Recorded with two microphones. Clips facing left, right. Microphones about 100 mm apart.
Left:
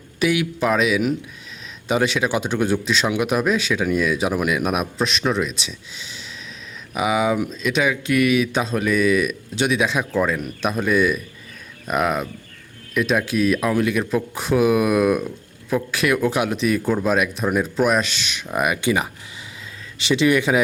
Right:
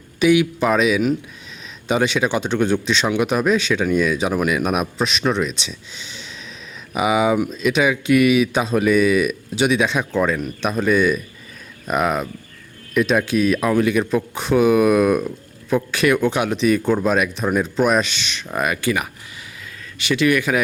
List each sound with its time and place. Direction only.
0.2 s a man's voice: centre (ahead or behind)
18.5 s speech: 15° left (ahead or behind)